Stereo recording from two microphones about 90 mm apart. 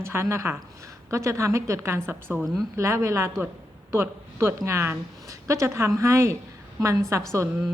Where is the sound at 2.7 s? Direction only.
30° right (ahead or behind).